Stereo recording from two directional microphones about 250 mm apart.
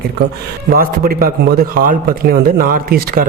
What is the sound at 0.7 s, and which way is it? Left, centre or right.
Speech, right.